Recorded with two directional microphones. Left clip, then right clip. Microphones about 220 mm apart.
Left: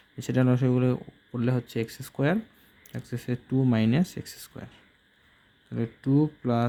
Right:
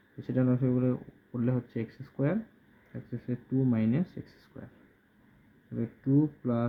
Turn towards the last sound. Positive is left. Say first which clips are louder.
# left 3 dB
turn(degrees=45)  # may be behind; listen again after turning